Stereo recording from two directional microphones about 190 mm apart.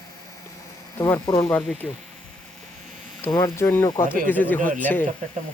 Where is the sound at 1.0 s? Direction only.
15° left (ahead or behind).